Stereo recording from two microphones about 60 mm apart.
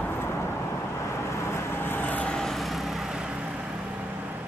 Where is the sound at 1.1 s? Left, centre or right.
Left.